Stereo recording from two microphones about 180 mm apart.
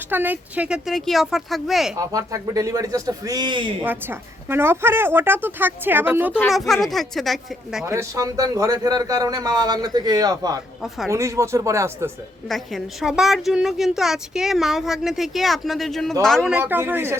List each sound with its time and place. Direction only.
0.1 s a woman's voice: 10° right (ahead or behind)
2.0 s a man's voice: 20° right (ahead or behind)
3.8 s a woman's voice: 10° right (ahead or behind)
6.5 s a woman's voice: centre (ahead or behind)
7.9 s a man's voice: 15° right (ahead or behind)
10.8 s a woman's voice: centre (ahead or behind)
11.1 s a woman's voice: 15° right (ahead or behind)
12.5 s a woman's voice: centre (ahead or behind)